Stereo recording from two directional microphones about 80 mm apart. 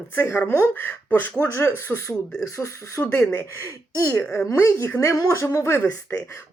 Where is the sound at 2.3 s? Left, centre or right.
Left.